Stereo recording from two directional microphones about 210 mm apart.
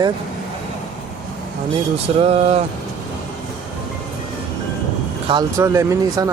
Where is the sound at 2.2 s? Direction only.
30° right (ahead or behind).